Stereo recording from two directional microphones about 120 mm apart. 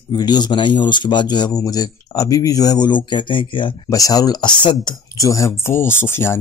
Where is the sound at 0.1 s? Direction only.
35° left (ahead or behind).